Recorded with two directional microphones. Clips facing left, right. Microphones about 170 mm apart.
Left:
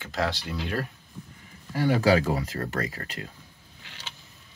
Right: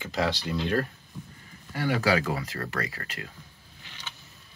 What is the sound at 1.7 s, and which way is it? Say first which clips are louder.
Speech: left 4 dB; 30° left (ahead or behind).